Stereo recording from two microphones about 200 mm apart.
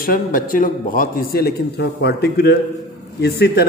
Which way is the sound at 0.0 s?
45° left (ahead or behind).